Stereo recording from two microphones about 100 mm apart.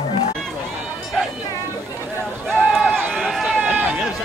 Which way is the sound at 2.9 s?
5° left (ahead or behind).